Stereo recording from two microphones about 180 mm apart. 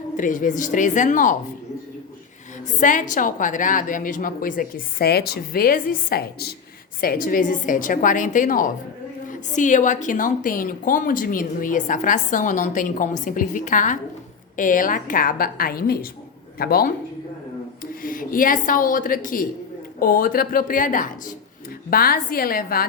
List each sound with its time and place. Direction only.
0.2 s a woman's voice: 45° left (ahead or behind)
2.8 s a woman's voice: 45° left (ahead or behind)
18.0 s a woman's voice: 50° left (ahead or behind)